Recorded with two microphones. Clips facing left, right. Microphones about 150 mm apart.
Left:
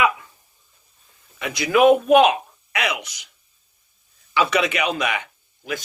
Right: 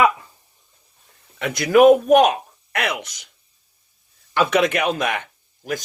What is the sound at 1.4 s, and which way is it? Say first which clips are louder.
Speech: right 3 dB; 60° right (ahead or behind).